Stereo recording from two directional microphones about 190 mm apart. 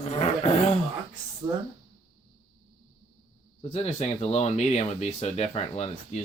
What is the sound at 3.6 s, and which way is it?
Speech, 35° left (ahead or behind).